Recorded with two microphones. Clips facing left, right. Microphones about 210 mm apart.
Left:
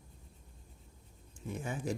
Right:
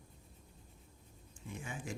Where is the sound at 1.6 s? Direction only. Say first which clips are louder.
Left 8 dB; 40° left (ahead or behind).